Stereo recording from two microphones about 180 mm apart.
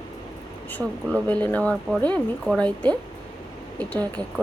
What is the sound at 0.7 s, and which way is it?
A woman's voice, 10° left (ahead or behind).